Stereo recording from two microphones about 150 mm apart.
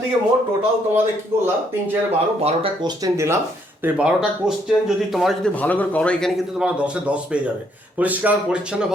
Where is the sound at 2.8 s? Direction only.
20° right (ahead or behind).